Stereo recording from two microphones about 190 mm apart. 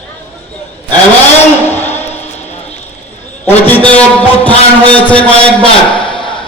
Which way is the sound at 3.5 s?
10° left (ahead or behind).